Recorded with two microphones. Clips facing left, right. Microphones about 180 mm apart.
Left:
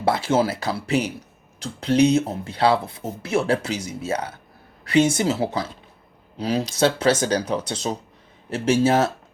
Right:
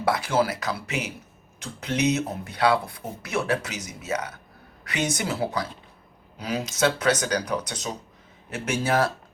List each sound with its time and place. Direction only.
0.0 s speech: 25° left (ahead or behind)